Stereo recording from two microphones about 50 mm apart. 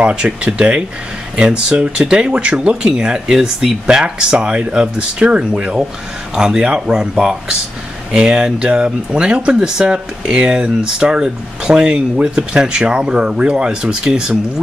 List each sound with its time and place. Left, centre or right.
0.0 s speech: right